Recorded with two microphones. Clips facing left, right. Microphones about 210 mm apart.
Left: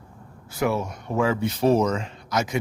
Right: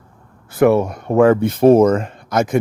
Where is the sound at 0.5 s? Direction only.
55° right (ahead or behind).